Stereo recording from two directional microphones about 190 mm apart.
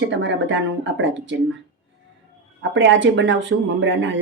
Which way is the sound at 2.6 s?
75° right (ahead or behind).